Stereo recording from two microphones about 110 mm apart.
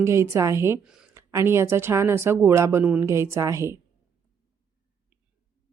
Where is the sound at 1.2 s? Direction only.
25° right (ahead or behind).